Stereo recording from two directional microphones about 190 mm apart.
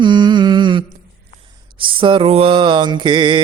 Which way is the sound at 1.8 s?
25° right (ahead or behind).